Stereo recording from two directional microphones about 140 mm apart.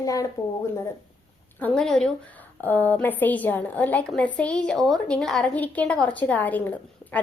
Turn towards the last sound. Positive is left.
turn(degrees=10)  # may be behind; listen again after turning